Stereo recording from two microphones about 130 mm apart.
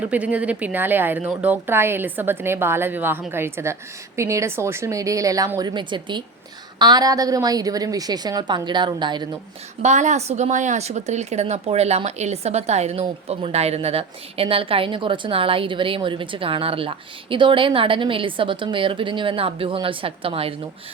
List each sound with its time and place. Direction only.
0.0 s a woman's voice: 10° right (ahead or behind); by 9.2 s 35° right (ahead or behind)
9.8 s a woman's voice: 65° right (ahead or behind); by 20.5 s 45° right (ahead or behind)